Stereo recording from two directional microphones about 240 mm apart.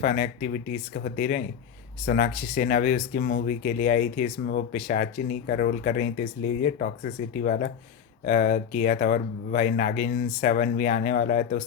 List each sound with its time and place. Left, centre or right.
0.0 s speech: left